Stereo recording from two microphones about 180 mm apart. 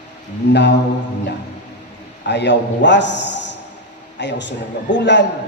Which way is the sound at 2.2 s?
70° left (ahead or behind).